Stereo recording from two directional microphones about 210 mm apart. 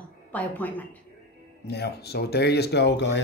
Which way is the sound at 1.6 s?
50° left (ahead or behind).